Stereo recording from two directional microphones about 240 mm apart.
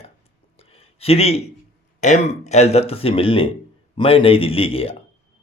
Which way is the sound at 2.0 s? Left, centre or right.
Left.